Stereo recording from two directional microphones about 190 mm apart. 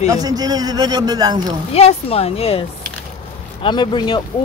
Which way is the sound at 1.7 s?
30° left (ahead or behind).